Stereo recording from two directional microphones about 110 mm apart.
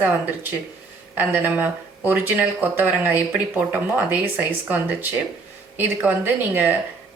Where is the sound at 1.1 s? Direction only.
15° right (ahead or behind).